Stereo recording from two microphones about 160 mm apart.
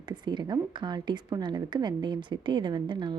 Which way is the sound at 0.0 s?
30° right (ahead or behind).